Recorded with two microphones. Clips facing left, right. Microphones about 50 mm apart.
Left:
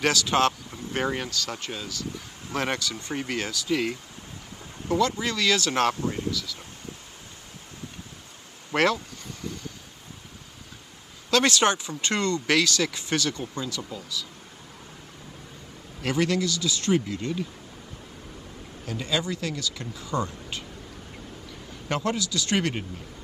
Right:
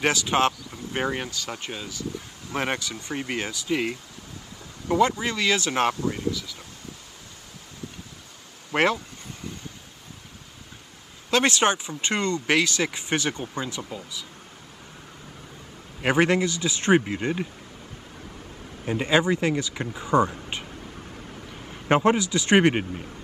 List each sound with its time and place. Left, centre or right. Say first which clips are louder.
0.0 s speech: even; right
0.7 s a sound: even; left
0.9 s speech: even; right
8.7 s vehicle: right 1 dB; right
11.2 s speech: even; right
16.0 s speech: right 4 dB; right
18.9 s speech: right 7 dB; right
21.8 s speech: right 7 dB; right